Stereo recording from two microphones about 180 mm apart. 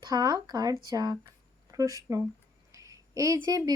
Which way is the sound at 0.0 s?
20° right (ahead or behind).